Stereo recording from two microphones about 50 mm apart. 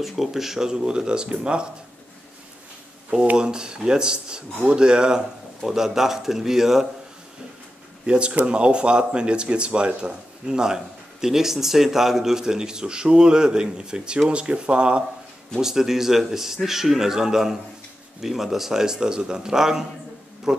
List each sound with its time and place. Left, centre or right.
0.0 s speech: centre
3.3 s speech: centre
8.1 s speech: centre
15.6 s speech: centre